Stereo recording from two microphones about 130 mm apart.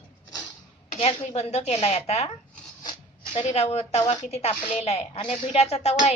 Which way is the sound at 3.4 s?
55° left (ahead or behind).